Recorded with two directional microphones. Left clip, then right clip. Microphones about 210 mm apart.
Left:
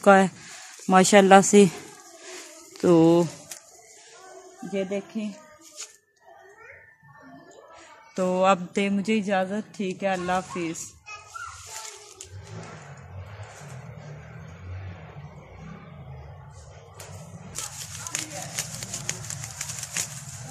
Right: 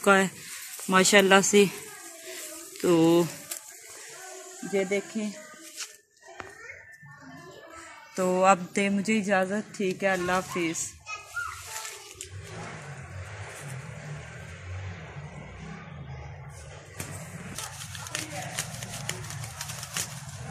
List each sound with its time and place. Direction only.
0.0 s speech: 50° left (ahead or behind)
2.2 s a sound: 50° left (ahead or behind)
4.7 s a woman's voice: 30° left (ahead or behind)
8.2 s a woman's voice: 35° left (ahead or behind)
18.1 s horse: 15° left (ahead or behind)
19.6 s a sound: 15° left (ahead or behind)